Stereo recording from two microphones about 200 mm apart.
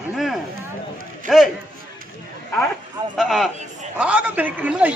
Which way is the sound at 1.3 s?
Centre (ahead or behind).